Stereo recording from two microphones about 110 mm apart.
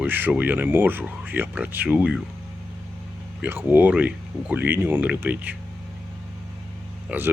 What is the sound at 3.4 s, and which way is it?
Speech, 20° right (ahead or behind).